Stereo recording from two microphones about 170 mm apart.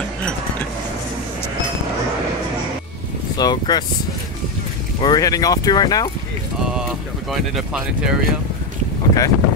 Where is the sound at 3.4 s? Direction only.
25° left (ahead or behind).